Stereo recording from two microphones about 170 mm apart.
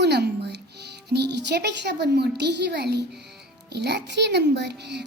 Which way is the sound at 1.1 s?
85° right.